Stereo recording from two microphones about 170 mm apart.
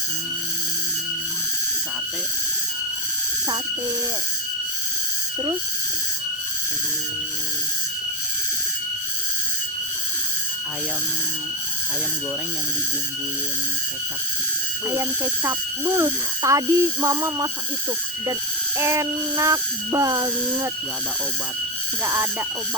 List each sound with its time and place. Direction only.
14.8 s speech: 15° right (ahead or behind)
18.8 s a sound: 15° right (ahead or behind)
22.0 s speech: 15° right (ahead or behind)